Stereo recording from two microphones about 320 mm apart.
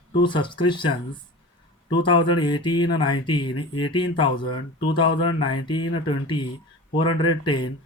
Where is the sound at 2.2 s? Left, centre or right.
Centre.